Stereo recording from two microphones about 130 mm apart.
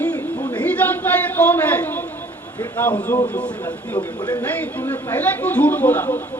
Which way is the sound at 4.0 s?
35° left (ahead or behind).